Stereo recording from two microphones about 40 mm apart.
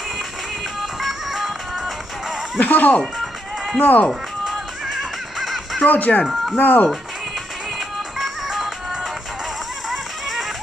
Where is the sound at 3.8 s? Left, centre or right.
Left.